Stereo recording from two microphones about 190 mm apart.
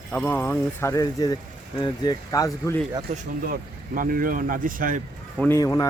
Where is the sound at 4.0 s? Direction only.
45° right (ahead or behind).